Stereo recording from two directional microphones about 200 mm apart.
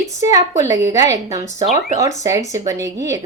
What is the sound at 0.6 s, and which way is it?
A woman's voice, 15° right (ahead or behind).